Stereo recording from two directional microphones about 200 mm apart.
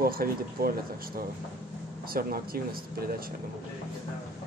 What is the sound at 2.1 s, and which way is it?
Speech, 50° right (ahead or behind).